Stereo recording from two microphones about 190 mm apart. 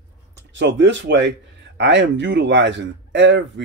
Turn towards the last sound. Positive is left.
turn(degrees=-70)  # may be behind; listen again after turning